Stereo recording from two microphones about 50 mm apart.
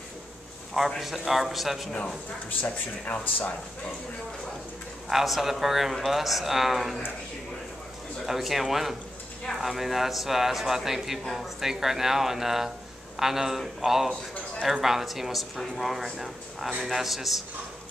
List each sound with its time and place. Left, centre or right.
0.7 s speech: centre
2.6 s speech: left
5.1 s speech: centre
8.3 s a man's voice: centre